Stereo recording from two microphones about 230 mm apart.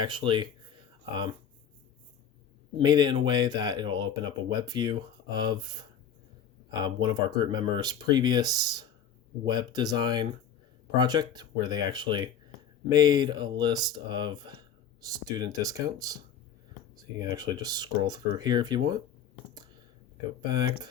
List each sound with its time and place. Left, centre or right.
0.0 s speech: right
2.7 s speech: centre